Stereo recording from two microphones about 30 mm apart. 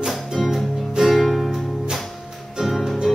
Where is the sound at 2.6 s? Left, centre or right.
Centre.